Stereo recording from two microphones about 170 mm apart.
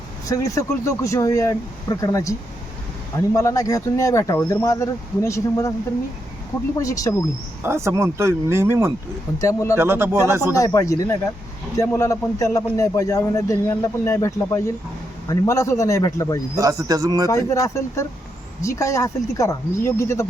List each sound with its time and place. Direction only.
0.3 s a man's voice: 20° left (ahead or behind)
6.7 s speech: 20° left (ahead or behind)
7.6 s speech: 15° right (ahead or behind)
9.4 s a man's voice: 20° left (ahead or behind)
9.7 s speech: 15° right (ahead or behind)
10.5 s a man's voice: 20° left (ahead or behind)
16.6 s a man's voice: 20° right (ahead or behind)
17.2 s a man's voice: 20° left (ahead or behind)